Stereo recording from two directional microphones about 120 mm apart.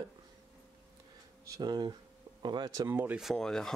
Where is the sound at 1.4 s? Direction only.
30° right (ahead or behind).